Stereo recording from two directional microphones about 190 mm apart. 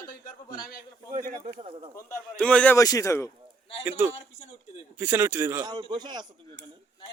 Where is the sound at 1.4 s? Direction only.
30° right (ahead or behind).